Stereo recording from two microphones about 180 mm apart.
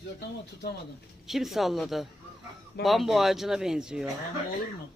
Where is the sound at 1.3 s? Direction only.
Centre (ahead or behind).